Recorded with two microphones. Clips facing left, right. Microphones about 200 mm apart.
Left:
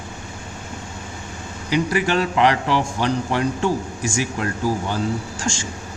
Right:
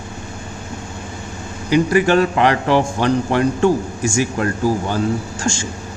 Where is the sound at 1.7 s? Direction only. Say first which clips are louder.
Right 6 dB; 50° right (ahead or behind).